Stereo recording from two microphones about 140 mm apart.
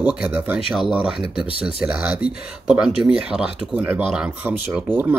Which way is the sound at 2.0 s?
5° right (ahead or behind).